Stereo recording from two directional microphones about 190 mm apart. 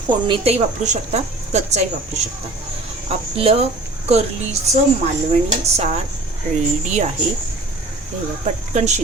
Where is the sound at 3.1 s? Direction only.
30° right (ahead or behind).